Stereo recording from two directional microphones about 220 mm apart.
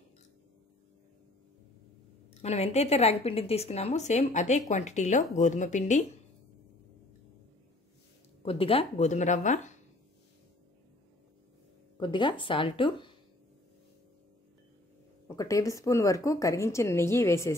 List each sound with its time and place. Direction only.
2.4 s speech: 30° left (ahead or behind)
8.4 s speech: 25° left (ahead or behind)
12.0 s speech: 20° left (ahead or behind)
15.2 s speech: 15° left (ahead or behind)